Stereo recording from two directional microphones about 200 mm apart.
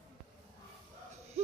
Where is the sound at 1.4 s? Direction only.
35° right (ahead or behind).